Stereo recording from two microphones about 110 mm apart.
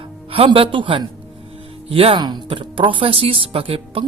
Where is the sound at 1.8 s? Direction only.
60° right (ahead or behind).